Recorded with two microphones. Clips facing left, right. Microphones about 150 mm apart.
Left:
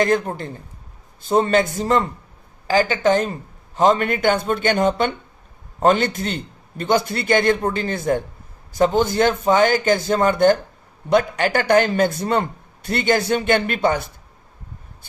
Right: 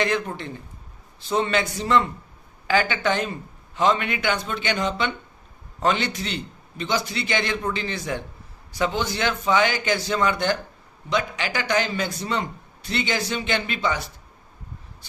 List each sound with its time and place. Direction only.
0.0 s a man's voice: 45° left (ahead or behind)